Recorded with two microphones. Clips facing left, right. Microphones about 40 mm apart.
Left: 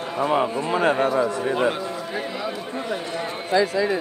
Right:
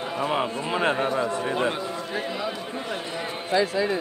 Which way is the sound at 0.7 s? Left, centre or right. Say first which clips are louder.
Left 3 dB; centre.